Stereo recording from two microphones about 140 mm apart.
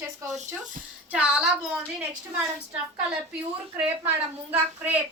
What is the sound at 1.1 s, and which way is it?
Speech, 10° right (ahead or behind).